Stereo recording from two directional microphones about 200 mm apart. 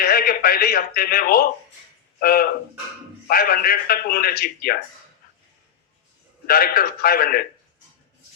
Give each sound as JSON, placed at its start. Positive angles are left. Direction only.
{"t": 0.0, "sound": "a man's voice", "side_deg": 50}
{"t": 6.5, "sound": "a man's voice", "side_deg": 50}